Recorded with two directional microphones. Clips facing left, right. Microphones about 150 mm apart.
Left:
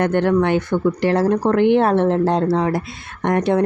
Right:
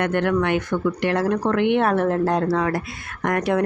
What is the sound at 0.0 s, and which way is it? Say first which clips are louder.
Speech: left 4 dB; 30° left (ahead or behind).